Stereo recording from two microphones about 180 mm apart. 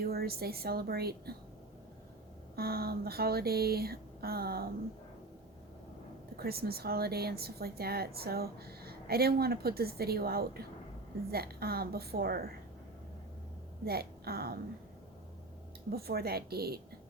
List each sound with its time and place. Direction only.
0.0 s a woman's voice: 60° right (ahead or behind)
2.6 s a woman's voice: 60° right (ahead or behind)
6.4 s a woman's voice: 60° right (ahead or behind)
13.8 s a woman's voice: 60° right (ahead or behind)
15.9 s a woman's voice: 60° right (ahead or behind)